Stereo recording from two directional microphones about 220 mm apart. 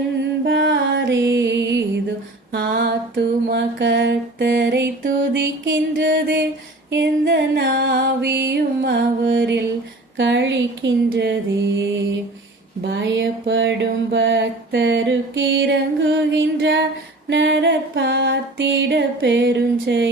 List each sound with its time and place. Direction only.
0.2 s music: 55° right (ahead or behind)
2.5 s a sound: 45° right (ahead or behind)
6.9 s music: 50° right (ahead or behind)
10.2 s speech: 55° right (ahead or behind)
12.8 s music: 55° right (ahead or behind)
17.2 s a sound: 55° right (ahead or behind)